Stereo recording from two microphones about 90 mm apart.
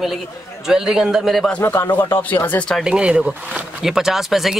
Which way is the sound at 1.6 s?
30° left (ahead or behind).